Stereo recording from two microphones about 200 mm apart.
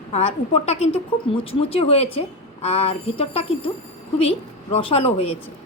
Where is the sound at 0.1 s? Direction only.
30° left (ahead or behind).